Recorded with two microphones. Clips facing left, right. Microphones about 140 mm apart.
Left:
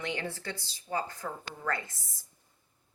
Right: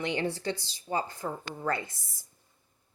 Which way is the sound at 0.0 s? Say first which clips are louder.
Right 5 dB; 20° right (ahead or behind).